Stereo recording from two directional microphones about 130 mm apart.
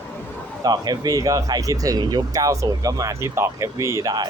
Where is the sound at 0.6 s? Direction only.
30° right (ahead or behind).